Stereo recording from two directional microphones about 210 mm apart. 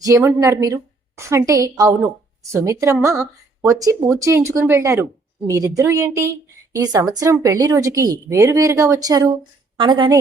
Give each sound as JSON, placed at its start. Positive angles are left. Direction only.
{"t": 0.0, "sound": "a woman's voice", "side_deg": -15}